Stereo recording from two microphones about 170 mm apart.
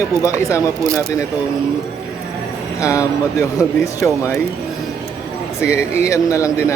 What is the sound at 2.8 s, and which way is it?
Speech, 20° left (ahead or behind).